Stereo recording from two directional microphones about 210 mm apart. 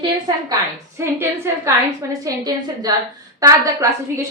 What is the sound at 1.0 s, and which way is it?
A woman's voice, 10° right (ahead or behind).